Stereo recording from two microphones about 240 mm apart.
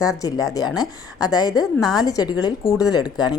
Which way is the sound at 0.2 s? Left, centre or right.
Centre.